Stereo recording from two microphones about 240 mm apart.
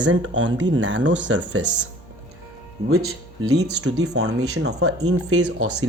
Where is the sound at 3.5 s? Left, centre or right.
Right.